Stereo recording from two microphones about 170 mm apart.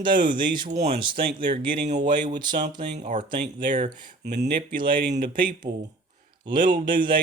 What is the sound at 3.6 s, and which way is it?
Speech, 50° right (ahead or behind).